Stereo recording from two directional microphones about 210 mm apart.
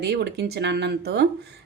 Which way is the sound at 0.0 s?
50° right (ahead or behind).